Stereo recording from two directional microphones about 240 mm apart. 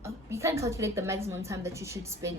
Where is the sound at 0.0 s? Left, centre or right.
Centre.